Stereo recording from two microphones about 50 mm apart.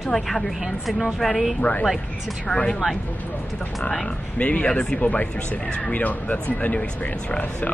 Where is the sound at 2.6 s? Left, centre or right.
Left.